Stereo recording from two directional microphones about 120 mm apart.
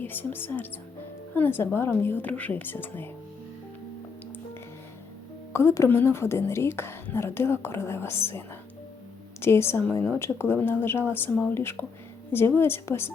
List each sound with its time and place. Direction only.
0.0 s speech: 15° left (ahead or behind)
5.5 s a woman's voice: 25° left (ahead or behind)